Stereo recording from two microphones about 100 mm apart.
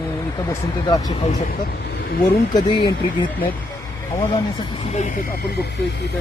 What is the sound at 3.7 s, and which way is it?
Vehicle, 25° left (ahead or behind).